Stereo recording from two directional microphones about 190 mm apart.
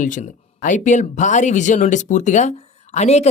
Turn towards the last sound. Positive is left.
turn(degrees=35)  # may be behind; listen again after turning